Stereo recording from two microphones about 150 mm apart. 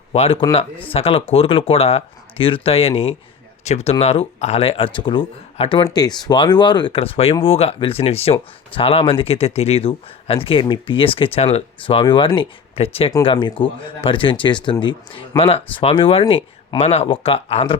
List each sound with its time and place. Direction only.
0.1 s speech: 40° left (ahead or behind)